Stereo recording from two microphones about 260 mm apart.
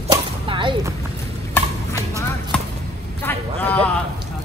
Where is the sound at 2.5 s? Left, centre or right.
Centre.